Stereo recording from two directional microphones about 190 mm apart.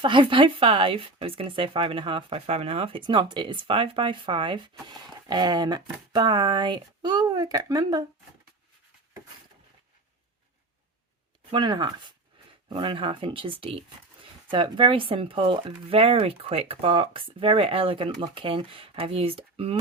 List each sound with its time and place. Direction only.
0.0 s speech: 25° right (ahead or behind)
11.5 s speech: 25° right (ahead or behind)